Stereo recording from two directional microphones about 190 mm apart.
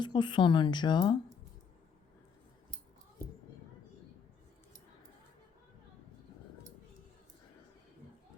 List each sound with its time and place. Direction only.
0.0 s a woman's voice: 25° left (ahead or behind)